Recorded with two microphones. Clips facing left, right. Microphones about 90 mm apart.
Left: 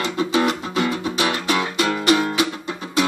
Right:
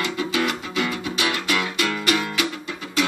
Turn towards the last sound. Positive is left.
turn(degrees=25)  # may be behind; listen again after turning